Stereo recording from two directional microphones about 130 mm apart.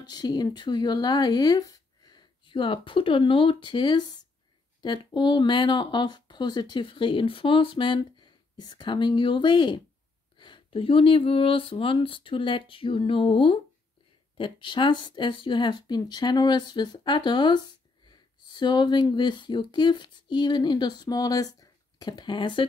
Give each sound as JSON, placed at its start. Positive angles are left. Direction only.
{"t": 0.0, "sound": "speech", "side_deg": 30}